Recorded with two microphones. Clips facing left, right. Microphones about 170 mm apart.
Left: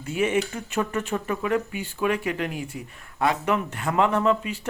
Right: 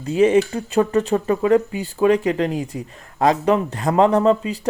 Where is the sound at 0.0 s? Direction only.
35° right (ahead or behind).